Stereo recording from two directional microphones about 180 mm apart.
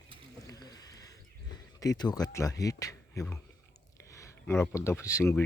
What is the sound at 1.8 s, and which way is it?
A man's voice, 20° left (ahead or behind).